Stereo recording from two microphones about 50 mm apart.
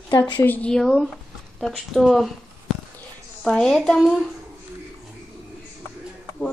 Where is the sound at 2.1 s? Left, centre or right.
Centre.